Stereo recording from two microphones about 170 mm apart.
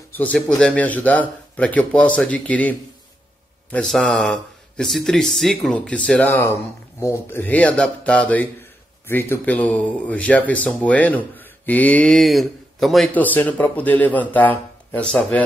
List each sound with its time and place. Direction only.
0.2 s speech: 5° left (ahead or behind)